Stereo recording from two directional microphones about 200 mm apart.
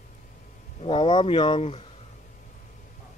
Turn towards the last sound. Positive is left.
turn(degrees=30)  # may be behind; listen again after turning